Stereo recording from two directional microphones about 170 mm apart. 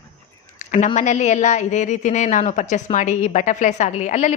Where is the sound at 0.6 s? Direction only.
50° left (ahead or behind).